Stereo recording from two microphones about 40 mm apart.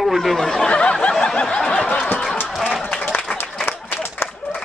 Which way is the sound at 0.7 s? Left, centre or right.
Left.